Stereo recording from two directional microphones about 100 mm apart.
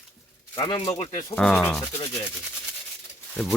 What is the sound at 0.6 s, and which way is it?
Speech, 55° left (ahead or behind).